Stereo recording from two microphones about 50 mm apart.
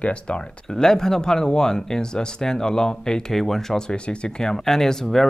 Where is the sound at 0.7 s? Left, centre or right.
Centre.